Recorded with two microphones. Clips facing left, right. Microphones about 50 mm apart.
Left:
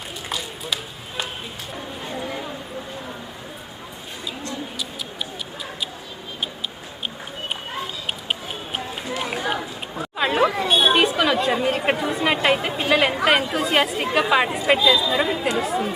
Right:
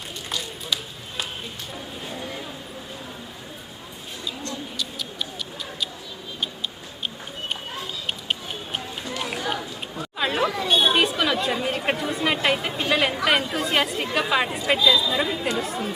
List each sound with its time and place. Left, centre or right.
1.7 s a sound: centre
8.0 s run: centre
10.2 s chatter: centre
14.7 s speech: centre